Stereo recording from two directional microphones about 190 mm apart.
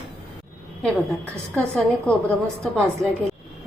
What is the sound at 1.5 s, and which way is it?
Speech, 5° left (ahead or behind).